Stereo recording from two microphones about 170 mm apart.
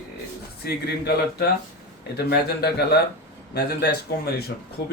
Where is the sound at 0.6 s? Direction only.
70° left (ahead or behind).